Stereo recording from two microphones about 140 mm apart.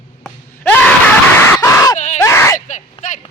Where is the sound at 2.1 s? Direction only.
20° left (ahead or behind).